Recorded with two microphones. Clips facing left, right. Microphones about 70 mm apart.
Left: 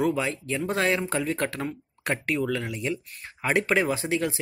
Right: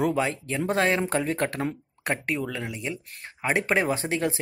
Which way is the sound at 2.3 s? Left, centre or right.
Centre.